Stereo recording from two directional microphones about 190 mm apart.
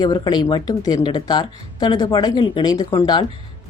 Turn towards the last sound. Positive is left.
turn(degrees=20)  # may be behind; listen again after turning